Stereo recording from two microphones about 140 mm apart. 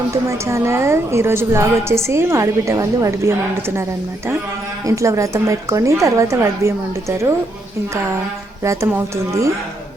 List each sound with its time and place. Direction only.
0.1 s a woman's voice: 20° right (ahead or behind)
4.9 s a woman's voice: 20° right (ahead or behind)
8.6 s a woman's voice: 20° right (ahead or behind)